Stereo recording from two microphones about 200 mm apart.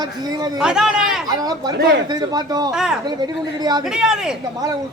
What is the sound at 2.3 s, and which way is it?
Speech, 20° right (ahead or behind).